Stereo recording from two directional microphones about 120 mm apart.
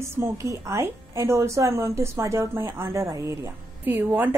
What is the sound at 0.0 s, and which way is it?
A woman's voice, 25° right (ahead or behind).